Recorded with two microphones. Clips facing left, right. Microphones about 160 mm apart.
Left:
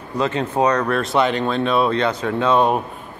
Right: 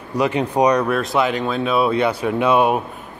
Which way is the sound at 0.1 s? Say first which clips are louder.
Right 2 dB; 15° right (ahead or behind).